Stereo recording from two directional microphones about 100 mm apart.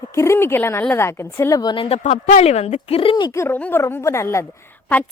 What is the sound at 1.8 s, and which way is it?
Speech, 90° left.